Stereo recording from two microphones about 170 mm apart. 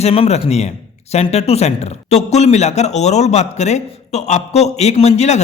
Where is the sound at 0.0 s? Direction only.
35° left (ahead or behind).